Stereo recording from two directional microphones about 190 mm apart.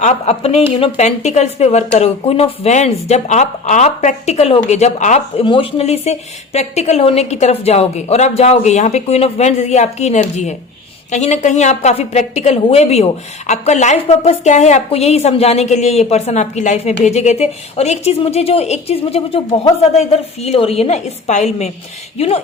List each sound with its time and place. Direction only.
0.0 s speech: 35° left (ahead or behind)